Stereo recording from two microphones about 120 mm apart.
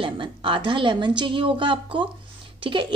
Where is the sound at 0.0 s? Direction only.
45° right (ahead or behind).